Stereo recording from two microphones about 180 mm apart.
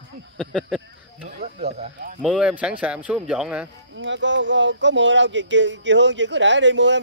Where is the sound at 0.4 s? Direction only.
5° left (ahead or behind).